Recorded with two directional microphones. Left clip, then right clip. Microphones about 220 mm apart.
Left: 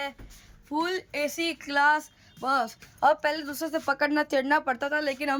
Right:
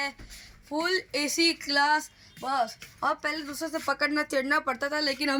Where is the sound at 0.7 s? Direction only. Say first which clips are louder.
Right 1 dB; 20° left (ahead or behind).